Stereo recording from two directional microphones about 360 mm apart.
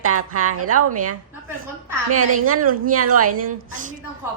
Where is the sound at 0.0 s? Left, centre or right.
Right.